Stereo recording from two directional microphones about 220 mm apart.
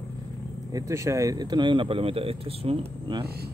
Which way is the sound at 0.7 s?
15° right (ahead or behind).